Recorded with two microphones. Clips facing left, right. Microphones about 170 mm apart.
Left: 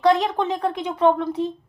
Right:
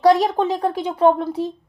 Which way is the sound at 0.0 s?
35° right (ahead or behind).